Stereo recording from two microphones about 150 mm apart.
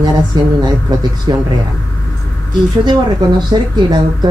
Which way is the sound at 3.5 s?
30° right (ahead or behind).